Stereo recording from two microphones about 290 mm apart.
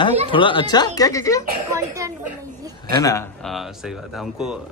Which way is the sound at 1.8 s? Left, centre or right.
Centre.